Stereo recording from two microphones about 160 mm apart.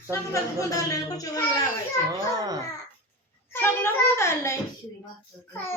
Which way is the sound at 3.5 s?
15° left (ahead or behind).